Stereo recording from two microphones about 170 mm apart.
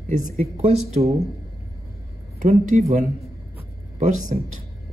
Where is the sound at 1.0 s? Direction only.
30° right (ahead or behind).